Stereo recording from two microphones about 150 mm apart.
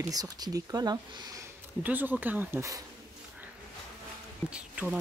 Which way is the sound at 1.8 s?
10° right (ahead or behind).